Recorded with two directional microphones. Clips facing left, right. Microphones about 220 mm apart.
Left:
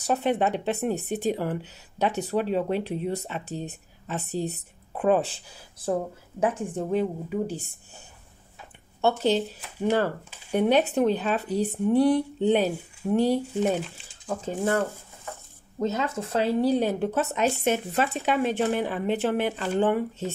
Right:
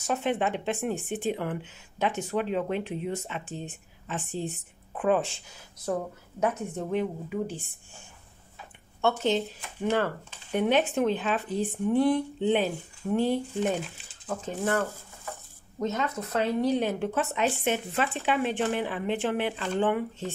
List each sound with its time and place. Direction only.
0.0 s speech: 35° left (ahead or behind)
9.0 s speech: 35° left (ahead or behind)
14.2 s speech: 30° left (ahead or behind)